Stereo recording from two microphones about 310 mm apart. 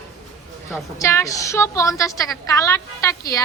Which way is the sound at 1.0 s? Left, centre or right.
Centre.